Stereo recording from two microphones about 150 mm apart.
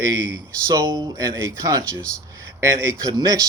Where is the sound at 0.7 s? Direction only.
25° right (ahead or behind).